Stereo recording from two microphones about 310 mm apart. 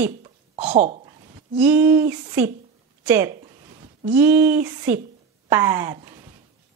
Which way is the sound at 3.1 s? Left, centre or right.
Centre.